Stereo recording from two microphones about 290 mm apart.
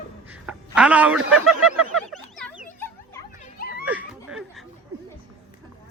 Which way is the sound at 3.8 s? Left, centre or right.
Centre.